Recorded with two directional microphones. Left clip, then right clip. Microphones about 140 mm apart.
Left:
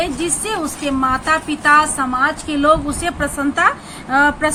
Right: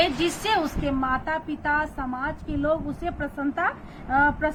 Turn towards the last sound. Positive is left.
turn(degrees=25)  # may be behind; listen again after turning